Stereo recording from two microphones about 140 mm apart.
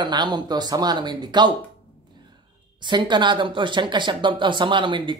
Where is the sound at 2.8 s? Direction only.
35° right (ahead or behind).